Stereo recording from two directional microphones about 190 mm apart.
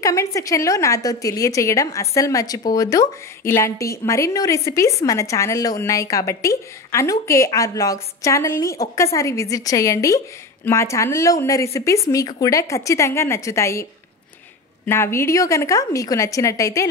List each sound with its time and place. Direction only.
0.0 s a woman's voice: 15° left (ahead or behind)
14.9 s a woman's voice: 15° left (ahead or behind)